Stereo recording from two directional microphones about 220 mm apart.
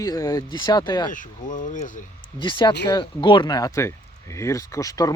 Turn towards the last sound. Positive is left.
turn(degrees=15)  # may be behind; listen again after turning